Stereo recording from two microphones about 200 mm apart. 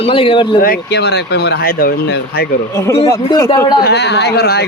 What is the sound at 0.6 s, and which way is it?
Speech, 50° left (ahead or behind).